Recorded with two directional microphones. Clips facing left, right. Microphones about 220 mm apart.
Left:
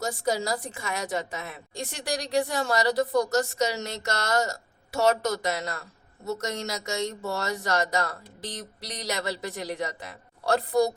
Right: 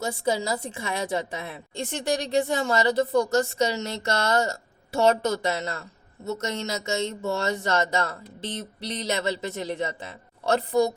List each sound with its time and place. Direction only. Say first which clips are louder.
0.3 s a woman's voice: right 2 dB; 25° right (ahead or behind)